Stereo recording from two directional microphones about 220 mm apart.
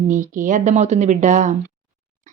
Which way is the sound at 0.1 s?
35° right (ahead or behind).